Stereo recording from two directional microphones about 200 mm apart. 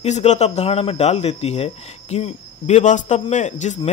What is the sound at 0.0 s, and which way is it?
Speech, 35° left (ahead or behind).